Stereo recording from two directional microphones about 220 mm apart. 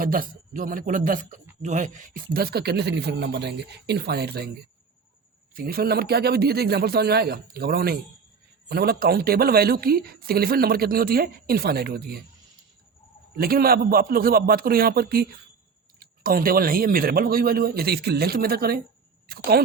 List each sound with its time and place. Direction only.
0.0 s a man's voice: 40° right (ahead or behind)
5.5 s a man's voice: 40° right (ahead or behind)
13.3 s a man's voice: 45° right (ahead or behind)